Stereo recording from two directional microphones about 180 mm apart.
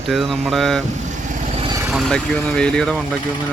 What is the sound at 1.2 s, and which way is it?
Vehicle, 35° right (ahead or behind).